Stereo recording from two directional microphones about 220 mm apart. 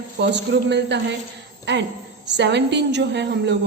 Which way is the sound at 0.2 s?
50° right (ahead or behind).